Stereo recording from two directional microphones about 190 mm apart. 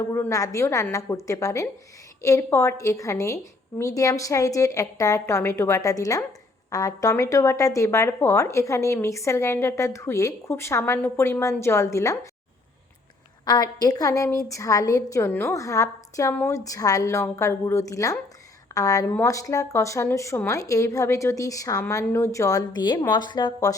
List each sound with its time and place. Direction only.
0.1 s speech: 15° left (ahead or behind)
13.4 s speech: 20° left (ahead or behind)